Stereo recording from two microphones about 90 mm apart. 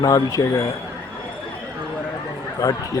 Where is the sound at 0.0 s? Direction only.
40° left (ahead or behind).